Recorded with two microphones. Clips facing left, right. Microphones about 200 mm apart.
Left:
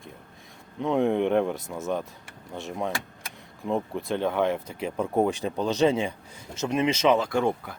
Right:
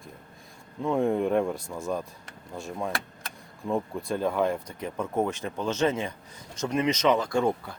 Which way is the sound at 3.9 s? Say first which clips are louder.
Left 1 dB; centre (ahead or behind).